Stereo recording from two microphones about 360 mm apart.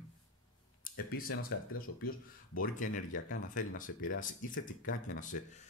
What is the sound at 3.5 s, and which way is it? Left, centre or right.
Speech, left.